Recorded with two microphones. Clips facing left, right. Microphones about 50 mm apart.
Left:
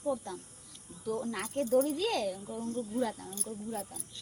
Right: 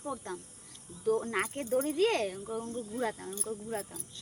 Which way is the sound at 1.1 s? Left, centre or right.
Right.